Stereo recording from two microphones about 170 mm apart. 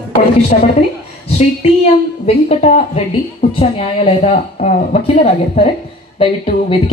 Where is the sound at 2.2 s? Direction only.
45° left (ahead or behind).